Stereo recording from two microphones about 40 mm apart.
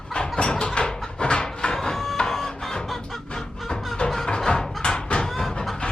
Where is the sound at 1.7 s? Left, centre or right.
Centre.